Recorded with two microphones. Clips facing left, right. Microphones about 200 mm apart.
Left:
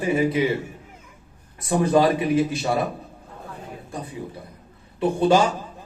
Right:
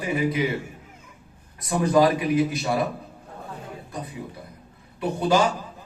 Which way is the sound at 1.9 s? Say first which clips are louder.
Even; 25° left (ahead or behind).